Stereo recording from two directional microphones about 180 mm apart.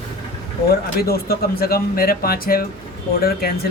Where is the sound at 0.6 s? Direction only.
60° left (ahead or behind).